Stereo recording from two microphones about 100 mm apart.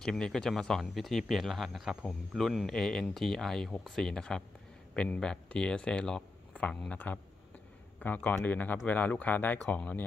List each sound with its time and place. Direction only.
0.0 s speech: 5° left (ahead or behind)